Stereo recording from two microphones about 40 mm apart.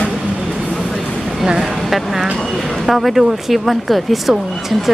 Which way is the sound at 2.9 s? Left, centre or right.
Centre.